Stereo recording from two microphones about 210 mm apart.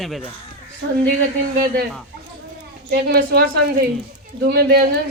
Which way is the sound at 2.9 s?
50° right (ahead or behind).